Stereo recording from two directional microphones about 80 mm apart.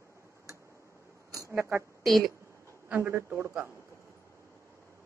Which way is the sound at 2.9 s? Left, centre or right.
Right.